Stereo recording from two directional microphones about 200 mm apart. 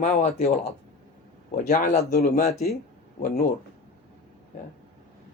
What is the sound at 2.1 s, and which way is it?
Speech, 50° left (ahead or behind).